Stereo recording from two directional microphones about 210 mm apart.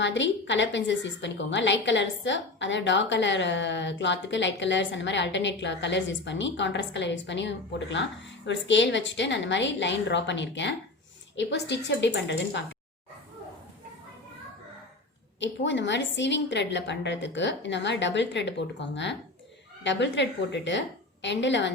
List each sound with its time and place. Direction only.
0.0 s a woman's voice: 60° left (ahead or behind)
15.4 s a woman's voice: 60° left (ahead or behind)